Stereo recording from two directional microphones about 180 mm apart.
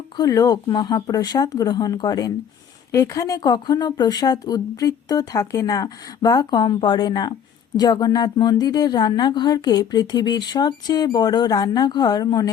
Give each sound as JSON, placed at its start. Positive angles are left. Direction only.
{"t": 0.2, "sound": "a woman's voice", "side_deg": 20}